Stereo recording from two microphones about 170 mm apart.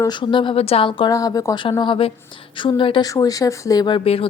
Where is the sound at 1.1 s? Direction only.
20° left (ahead or behind).